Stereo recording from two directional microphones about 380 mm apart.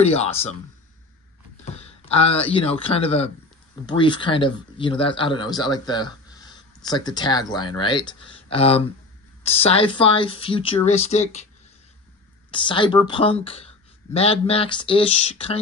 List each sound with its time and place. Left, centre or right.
0.0 s speech: centre
1.6 s speech: centre
12.4 s speech: centre